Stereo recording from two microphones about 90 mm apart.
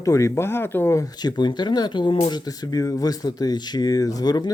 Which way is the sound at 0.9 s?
50° left (ahead or behind).